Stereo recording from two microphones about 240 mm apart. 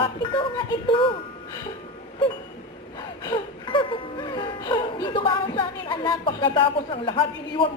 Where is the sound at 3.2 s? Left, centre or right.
Left.